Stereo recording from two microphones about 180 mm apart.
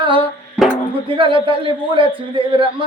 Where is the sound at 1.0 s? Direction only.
30° right (ahead or behind).